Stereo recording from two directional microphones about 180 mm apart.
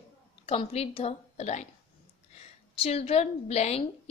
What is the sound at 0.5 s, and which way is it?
A woman's voice, 35° left (ahead or behind).